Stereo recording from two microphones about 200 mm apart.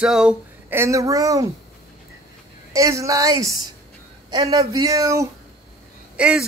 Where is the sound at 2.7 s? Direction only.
15° right (ahead or behind).